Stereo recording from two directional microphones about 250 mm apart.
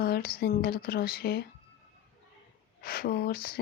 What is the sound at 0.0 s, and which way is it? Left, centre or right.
Speech, left.